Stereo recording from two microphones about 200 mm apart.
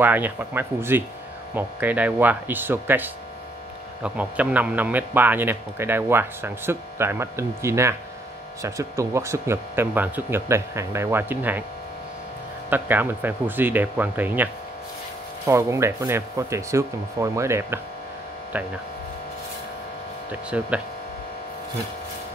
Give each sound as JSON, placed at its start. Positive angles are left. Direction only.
{"t": 0.0, "sound": "speech", "side_deg": -10}
{"t": 12.6, "sound": "speech", "side_deg": -10}
{"t": 20.2, "sound": "speech", "side_deg": -5}